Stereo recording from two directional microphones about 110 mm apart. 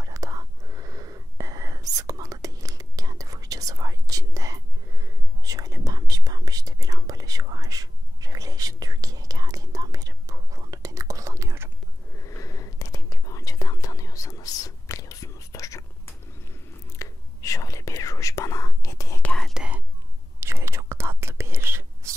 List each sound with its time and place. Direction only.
0.0 s whispering: 35° right (ahead or behind)
12.2 s whispering: 30° left (ahead or behind)
19.2 s whispering: 5° left (ahead or behind)
19.5 s whispering: 10° right (ahead or behind)
20.3 s whispering: 25° right (ahead or behind)